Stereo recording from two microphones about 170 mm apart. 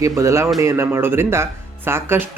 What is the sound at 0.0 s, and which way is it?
Speech, 20° right (ahead or behind).